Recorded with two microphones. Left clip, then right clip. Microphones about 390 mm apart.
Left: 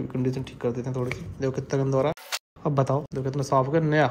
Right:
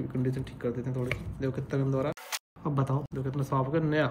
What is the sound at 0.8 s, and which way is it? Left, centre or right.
Speech, centre.